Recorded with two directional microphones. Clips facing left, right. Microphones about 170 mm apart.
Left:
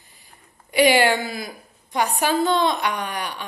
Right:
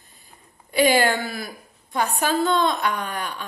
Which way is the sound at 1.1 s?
20° left (ahead or behind).